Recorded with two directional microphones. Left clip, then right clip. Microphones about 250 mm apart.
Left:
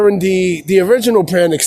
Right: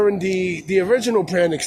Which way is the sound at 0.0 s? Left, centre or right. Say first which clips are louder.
Left 6 dB; left.